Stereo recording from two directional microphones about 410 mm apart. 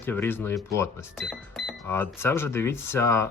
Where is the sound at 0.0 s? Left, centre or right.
Centre.